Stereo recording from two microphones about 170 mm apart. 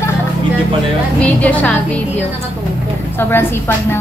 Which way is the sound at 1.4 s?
10° left (ahead or behind).